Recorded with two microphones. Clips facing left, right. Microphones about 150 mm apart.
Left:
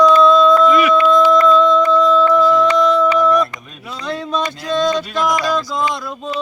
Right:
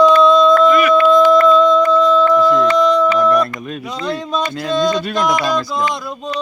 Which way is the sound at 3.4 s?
65° right (ahead or behind).